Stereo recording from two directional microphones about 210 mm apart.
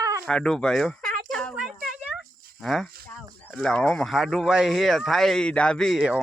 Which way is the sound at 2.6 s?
Centre (ahead or behind).